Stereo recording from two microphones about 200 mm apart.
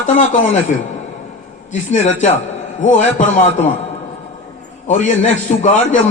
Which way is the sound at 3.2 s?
40° left (ahead or behind).